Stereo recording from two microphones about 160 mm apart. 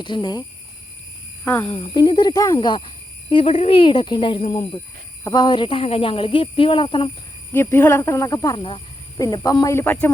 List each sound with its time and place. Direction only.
0.0 s speech: 30° left (ahead or behind)
1.6 s speech: 30° left (ahead or behind)
7.5 s speech: 15° left (ahead or behind)